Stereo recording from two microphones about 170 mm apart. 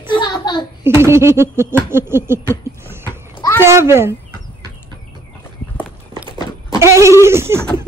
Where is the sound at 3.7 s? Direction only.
15° right (ahead or behind).